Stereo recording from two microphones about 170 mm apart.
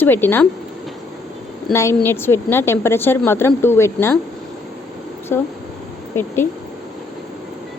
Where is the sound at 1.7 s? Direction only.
15° left (ahead or behind).